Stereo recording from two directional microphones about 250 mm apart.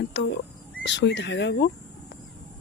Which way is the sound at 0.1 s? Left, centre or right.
Left.